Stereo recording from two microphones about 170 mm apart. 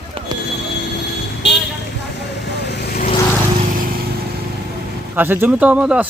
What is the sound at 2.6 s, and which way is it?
Vehicle, 75° left (ahead or behind).